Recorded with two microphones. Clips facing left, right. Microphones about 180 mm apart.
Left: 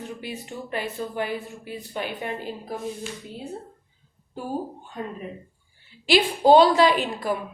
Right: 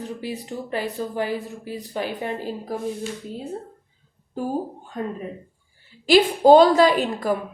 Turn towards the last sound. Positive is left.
turn(degrees=-40)  # may be behind; listen again after turning